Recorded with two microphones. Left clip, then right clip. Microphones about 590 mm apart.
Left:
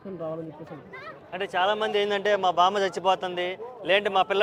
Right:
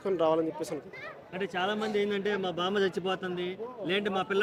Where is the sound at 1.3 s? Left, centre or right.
Left.